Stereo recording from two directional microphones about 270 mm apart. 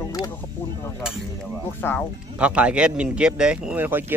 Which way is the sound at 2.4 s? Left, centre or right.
Centre.